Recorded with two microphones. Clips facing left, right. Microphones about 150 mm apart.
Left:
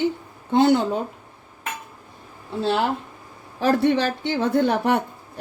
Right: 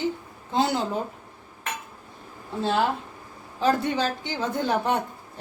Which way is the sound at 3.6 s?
65° left (ahead or behind).